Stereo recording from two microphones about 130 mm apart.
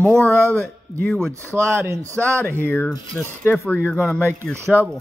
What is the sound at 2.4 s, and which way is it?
Speech, 15° left (ahead or behind).